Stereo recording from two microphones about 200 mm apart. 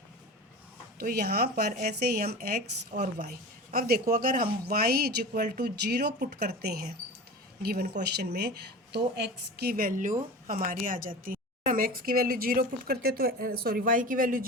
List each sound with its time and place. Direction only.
0.9 s speech: 50° right (ahead or behind)